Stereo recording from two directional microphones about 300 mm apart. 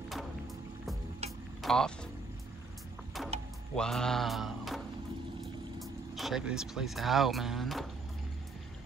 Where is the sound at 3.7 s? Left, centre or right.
Centre.